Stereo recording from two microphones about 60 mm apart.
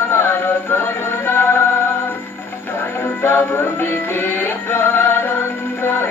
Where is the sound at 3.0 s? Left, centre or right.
Left.